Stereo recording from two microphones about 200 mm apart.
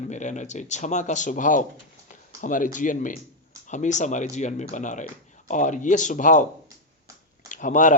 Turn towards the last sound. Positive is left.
turn(degrees=40)  # may be behind; listen again after turning